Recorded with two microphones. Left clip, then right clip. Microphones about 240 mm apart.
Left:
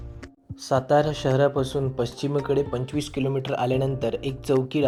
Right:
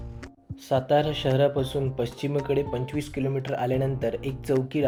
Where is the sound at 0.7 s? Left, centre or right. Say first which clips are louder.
Left 2 dB; centre.